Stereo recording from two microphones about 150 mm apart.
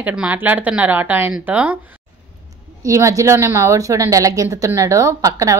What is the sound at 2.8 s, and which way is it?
A woman's voice, 20° right (ahead or behind).